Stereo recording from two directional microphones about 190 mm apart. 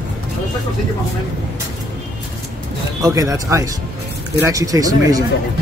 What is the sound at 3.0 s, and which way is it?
Speech, 15° right (ahead or behind).